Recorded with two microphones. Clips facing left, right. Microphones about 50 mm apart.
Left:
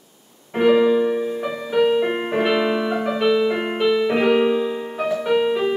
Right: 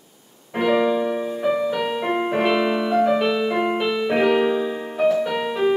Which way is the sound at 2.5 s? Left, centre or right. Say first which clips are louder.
Right 1 dB; centre.